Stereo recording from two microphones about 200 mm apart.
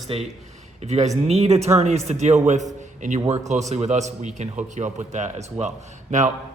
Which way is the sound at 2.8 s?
40° right (ahead or behind).